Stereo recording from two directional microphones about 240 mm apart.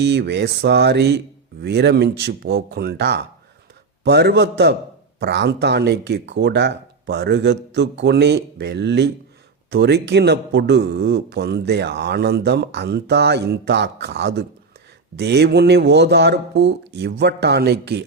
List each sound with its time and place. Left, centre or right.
0.0 s speech: right